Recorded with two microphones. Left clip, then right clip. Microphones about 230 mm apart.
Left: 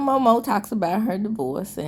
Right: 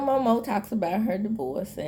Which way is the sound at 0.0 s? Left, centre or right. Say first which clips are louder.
Left 5 dB; left.